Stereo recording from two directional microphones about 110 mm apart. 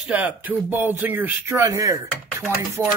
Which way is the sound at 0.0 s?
15° right (ahead or behind).